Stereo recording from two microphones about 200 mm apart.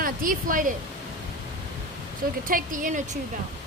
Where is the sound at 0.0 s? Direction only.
45° right (ahead or behind).